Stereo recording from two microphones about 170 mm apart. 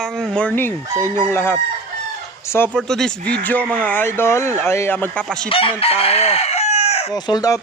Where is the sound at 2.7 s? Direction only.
5° left (ahead or behind).